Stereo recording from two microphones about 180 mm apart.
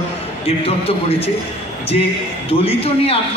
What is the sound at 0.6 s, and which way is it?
Speech, 35° left (ahead or behind).